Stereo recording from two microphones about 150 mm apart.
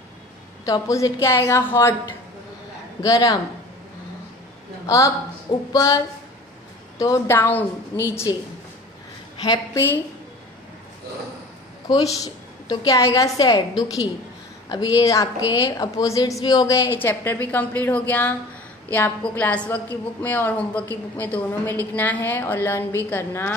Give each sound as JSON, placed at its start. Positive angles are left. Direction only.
{"t": 0.7, "sound": "a woman's voice", "side_deg": 20}
{"t": 3.0, "sound": "a woman's voice", "side_deg": 20}
{"t": 4.8, "sound": "a woman's voice", "side_deg": 20}
{"t": 8.3, "sound": "a woman's voice", "side_deg": 30}
{"t": 11.9, "sound": "a woman's voice", "side_deg": 25}